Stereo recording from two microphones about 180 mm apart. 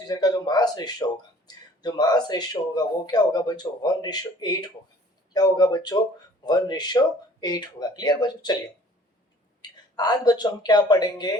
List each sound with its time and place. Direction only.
0.1 s speech: 20° left (ahead or behind)
9.6 s speech: 25° left (ahead or behind)